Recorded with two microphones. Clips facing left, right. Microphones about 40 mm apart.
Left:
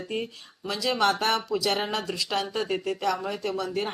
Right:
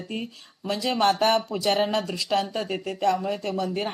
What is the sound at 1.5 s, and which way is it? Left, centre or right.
Speech, right.